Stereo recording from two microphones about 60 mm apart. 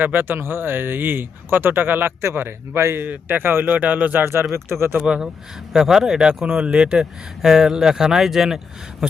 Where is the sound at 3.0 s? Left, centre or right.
Right.